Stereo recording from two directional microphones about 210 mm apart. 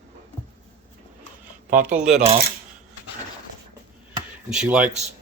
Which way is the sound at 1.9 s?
Centre (ahead or behind).